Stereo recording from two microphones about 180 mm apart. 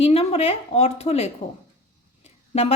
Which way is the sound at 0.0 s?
35° left (ahead or behind).